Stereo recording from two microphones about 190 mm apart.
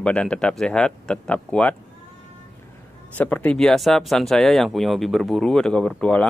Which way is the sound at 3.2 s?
10° left (ahead or behind).